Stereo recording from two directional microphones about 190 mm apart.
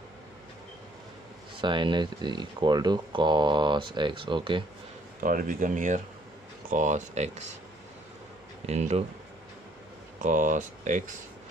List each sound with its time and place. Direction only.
1.6 s speech: 25° right (ahead or behind)
5.2 s speech: 45° right (ahead or behind)
8.6 s speech: 35° right (ahead or behind)
10.2 s speech: 40° right (ahead or behind)